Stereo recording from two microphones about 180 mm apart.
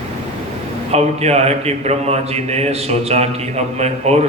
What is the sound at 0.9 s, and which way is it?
A man's voice, 35° right (ahead or behind).